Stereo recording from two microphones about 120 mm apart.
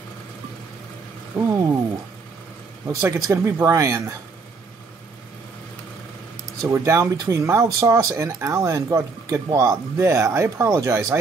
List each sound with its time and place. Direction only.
1.3 s speech: 25° right (ahead or behind)
2.9 s speech: 25° right (ahead or behind)
6.6 s speech: 25° right (ahead or behind)